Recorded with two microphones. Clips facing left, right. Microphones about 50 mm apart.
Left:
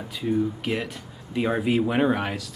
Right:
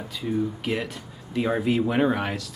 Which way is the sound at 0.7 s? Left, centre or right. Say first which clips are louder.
Even; centre.